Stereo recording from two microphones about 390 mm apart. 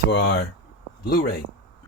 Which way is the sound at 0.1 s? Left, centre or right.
Left.